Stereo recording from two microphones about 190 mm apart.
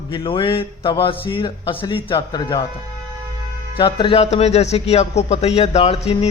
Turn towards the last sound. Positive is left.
turn(degrees=30)  # may be behind; listen again after turning